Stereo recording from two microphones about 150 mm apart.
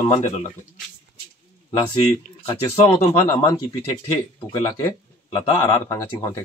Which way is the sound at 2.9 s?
20° left (ahead or behind).